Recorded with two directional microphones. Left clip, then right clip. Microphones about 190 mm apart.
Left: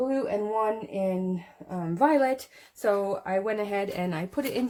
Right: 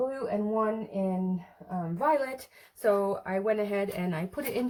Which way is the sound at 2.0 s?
30° left (ahead or behind).